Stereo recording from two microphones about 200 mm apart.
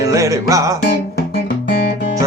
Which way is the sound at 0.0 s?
15° right (ahead or behind).